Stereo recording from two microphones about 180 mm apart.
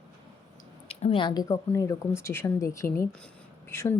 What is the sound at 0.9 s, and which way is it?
Speech, 35° left (ahead or behind).